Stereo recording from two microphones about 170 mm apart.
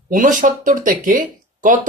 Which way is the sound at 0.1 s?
50° right (ahead or behind).